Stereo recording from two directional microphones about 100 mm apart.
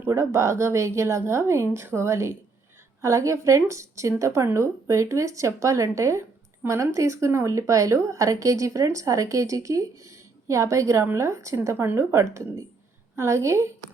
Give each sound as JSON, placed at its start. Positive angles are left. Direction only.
{"t": 0.1, "sound": "speech", "side_deg": -30}